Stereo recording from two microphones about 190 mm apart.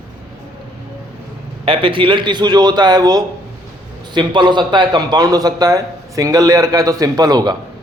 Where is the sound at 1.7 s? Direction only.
25° right (ahead or behind).